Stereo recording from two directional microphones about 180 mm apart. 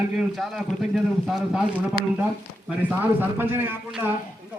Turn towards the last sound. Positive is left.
turn(degrees=-10)  # may be behind; listen again after turning